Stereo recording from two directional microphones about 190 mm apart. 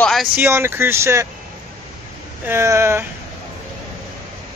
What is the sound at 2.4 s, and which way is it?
Speech, 15° right (ahead or behind).